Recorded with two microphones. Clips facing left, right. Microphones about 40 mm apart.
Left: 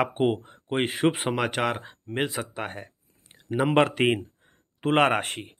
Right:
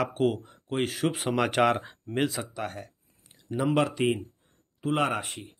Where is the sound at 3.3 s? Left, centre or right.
Left.